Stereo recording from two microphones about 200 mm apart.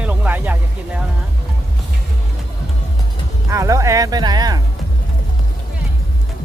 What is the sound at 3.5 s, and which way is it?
Music, 15° right (ahead or behind).